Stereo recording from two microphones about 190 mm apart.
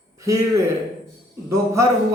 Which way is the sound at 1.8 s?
15° right (ahead or behind).